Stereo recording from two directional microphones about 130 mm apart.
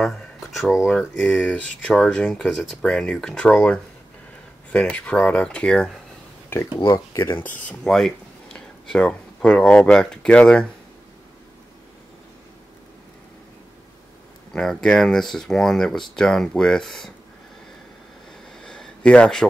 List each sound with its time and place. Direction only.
0.0 s speech: 5° left (ahead or behind)
6.5 s speech: 20° left (ahead or behind)
14.5 s speech: 5° left (ahead or behind)
18.6 s a sound: 5° left (ahead or behind)